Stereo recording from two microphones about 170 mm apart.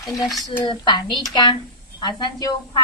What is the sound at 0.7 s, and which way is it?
Speech, 25° left (ahead or behind).